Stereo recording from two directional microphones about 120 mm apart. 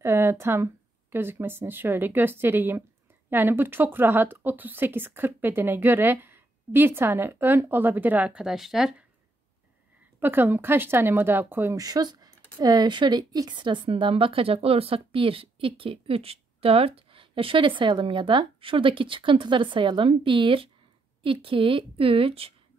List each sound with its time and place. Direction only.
0.0 s speech: 20° right (ahead or behind); by 8.9 s 5° right (ahead or behind)
10.2 s speech: 15° right (ahead or behind)
11.8 s speech: 35° right (ahead or behind); by 22.5 s 55° right (ahead or behind)